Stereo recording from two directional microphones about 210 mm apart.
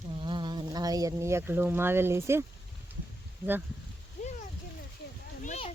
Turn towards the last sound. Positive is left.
turn(degrees=30)  # may be behind; listen again after turning